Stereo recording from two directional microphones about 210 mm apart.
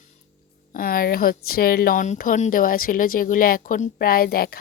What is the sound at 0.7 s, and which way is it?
Speech, 45° left (ahead or behind).